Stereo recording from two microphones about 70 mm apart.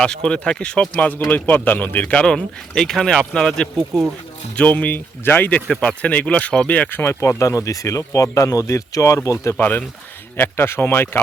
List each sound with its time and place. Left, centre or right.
0.0 s speech: centre
2.2 s speech: centre
4.5 s speech: left
7.2 s speech: left
9.6 s speech: left